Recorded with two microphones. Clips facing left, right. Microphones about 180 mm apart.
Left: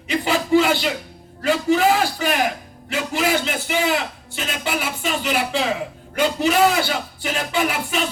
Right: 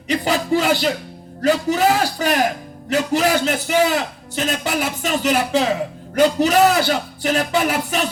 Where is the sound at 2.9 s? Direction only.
40° right (ahead or behind).